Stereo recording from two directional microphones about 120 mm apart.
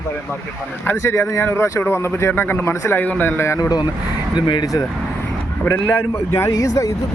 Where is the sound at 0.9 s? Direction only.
20° left (ahead or behind); by 4.7 s 40° left (ahead or behind).